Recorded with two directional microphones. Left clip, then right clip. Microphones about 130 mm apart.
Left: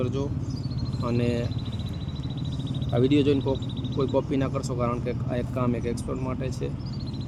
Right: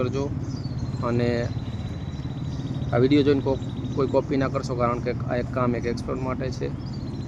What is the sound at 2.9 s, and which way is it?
Speech, 50° left (ahead or behind).